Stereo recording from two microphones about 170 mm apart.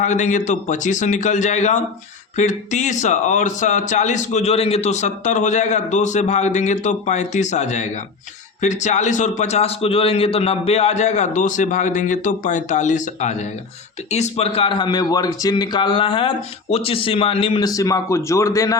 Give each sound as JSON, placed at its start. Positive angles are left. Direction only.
{"t": 0.0, "sound": "a man's voice", "side_deg": 45}